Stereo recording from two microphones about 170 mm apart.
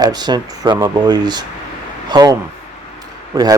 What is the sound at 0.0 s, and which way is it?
Speech, 25° right (ahead or behind).